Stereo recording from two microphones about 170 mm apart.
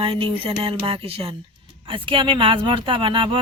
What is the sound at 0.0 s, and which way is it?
Speech, 30° right (ahead or behind).